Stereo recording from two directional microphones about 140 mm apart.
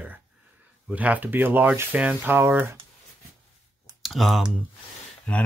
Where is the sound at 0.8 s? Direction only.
10° right (ahead or behind).